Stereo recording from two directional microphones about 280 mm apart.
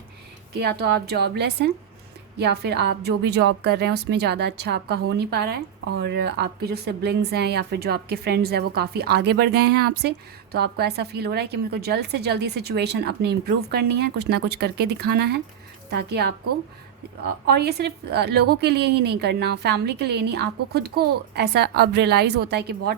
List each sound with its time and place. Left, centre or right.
0.5 s speech: right